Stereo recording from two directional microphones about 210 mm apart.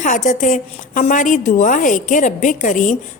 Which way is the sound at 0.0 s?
35° left (ahead or behind).